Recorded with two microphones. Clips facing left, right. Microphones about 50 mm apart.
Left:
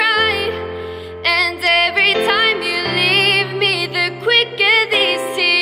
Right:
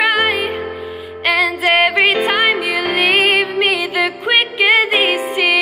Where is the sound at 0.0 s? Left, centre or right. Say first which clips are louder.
Even; centre.